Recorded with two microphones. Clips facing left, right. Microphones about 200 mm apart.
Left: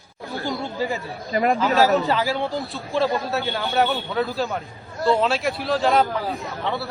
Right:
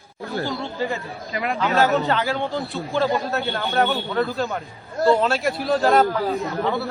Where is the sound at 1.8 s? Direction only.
Centre (ahead or behind).